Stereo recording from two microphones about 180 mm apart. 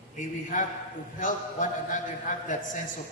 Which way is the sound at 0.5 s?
50° left (ahead or behind).